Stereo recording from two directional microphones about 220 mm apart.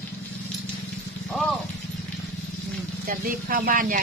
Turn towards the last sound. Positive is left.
turn(degrees=-40)  # may be behind; listen again after turning